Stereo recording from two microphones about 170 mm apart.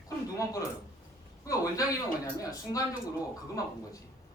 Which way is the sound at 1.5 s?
20° left (ahead or behind).